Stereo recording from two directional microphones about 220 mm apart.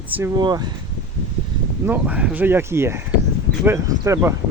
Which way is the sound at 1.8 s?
10° right (ahead or behind).